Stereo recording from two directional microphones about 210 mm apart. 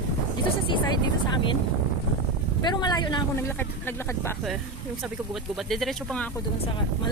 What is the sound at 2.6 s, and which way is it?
Speech, 20° left (ahead or behind).